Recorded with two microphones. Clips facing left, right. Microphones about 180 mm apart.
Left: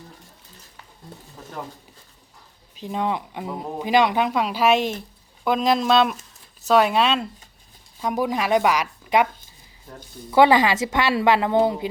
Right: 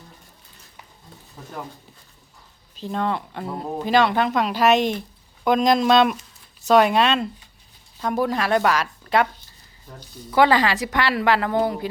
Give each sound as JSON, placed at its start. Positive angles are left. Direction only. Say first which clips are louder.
{"t": 2.8, "sound": "speech", "louder": "even", "side_deg": 10}
{"t": 10.3, "sound": "a woman's voice", "louder": "left 2 dB", "side_deg": 20}